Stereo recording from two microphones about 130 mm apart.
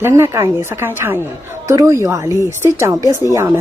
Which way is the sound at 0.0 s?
20° right (ahead or behind).